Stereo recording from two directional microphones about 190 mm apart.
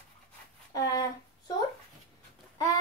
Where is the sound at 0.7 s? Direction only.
20° left (ahead or behind).